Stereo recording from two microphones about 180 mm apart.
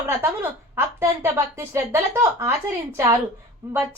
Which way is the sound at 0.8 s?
15° right (ahead or behind).